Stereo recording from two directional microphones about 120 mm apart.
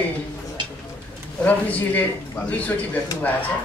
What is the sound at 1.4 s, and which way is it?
A man's voice, 10° left (ahead or behind).